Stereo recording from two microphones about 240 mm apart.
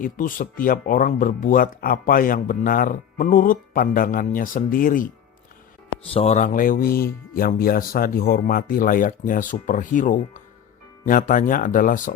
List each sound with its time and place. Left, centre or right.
0.0 s speech: left
6.1 s speech: left